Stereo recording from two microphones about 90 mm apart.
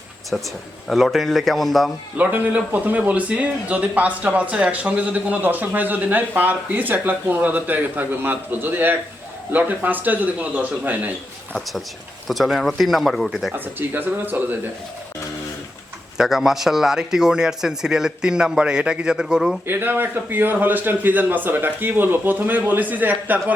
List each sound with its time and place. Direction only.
0.9 s speech: centre (ahead or behind)
2.1 s speech: 20° right (ahead or behind)
12.3 s speech: centre (ahead or behind)
13.7 s speech: 20° right (ahead or behind)
16.1 s speech: 5° right (ahead or behind)
19.6 s speech: 25° right (ahead or behind)